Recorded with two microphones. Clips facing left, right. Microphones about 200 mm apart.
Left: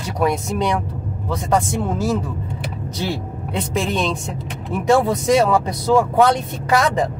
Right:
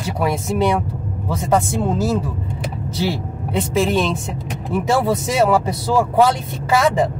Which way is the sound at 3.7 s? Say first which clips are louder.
Right 3 dB; 5° right (ahead or behind).